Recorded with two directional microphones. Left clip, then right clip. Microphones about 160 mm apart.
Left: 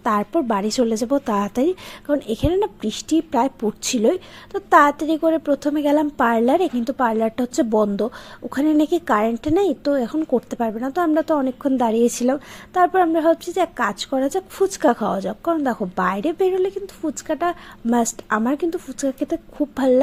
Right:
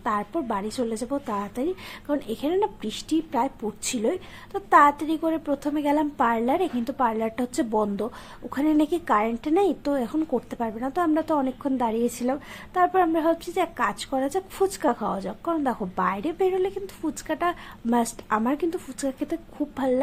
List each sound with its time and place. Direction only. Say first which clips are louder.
0.0 s a woman's voice: left 7 dB; 35° left (ahead or behind)